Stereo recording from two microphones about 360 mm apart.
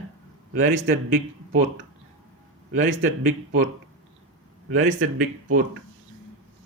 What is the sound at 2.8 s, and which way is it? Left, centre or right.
Speech, right.